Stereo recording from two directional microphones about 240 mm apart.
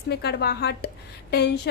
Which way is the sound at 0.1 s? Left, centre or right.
Left.